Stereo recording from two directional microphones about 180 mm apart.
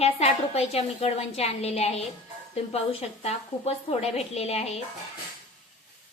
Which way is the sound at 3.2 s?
35° left (ahead or behind).